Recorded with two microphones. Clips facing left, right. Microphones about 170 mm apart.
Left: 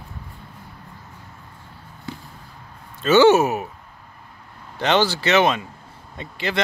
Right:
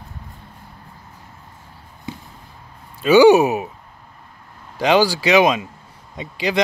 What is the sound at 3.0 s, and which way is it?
Speech, 10° right (ahead or behind).